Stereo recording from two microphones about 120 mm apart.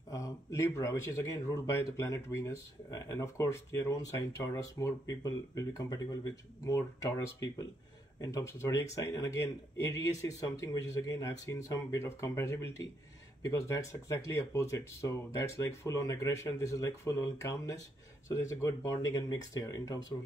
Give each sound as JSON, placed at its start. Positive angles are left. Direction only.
{"t": 0.1, "sound": "speech", "side_deg": 25}